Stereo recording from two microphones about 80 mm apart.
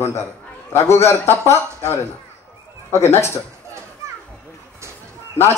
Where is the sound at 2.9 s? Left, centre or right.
Left.